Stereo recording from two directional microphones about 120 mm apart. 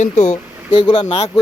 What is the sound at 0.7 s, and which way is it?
Speech, 40° left (ahead or behind).